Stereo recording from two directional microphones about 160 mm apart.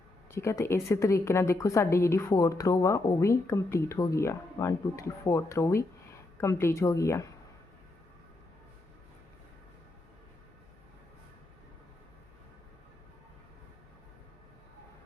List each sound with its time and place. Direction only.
0.3 s speech: 15° left (ahead or behind)